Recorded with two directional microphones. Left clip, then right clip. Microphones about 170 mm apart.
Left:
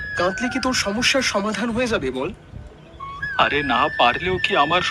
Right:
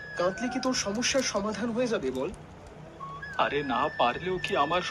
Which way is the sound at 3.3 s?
30° left (ahead or behind).